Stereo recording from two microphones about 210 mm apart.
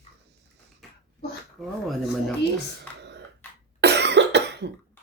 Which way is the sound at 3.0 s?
55° right (ahead or behind).